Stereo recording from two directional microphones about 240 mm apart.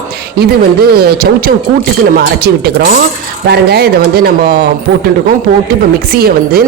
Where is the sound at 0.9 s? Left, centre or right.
Right.